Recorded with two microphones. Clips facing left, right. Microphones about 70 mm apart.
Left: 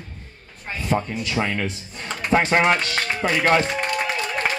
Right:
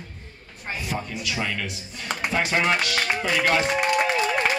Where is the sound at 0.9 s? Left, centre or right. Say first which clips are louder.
Left 8 dB; left.